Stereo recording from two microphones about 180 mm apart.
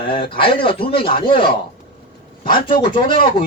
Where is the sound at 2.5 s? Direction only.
25° left (ahead or behind).